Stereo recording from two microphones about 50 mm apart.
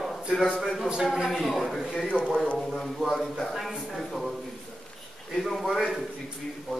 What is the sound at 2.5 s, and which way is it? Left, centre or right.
A man's voice, centre.